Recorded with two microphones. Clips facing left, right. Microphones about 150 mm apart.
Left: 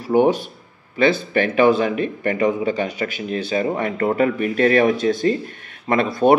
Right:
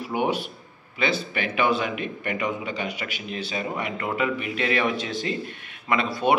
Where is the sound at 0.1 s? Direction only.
45° left (ahead or behind).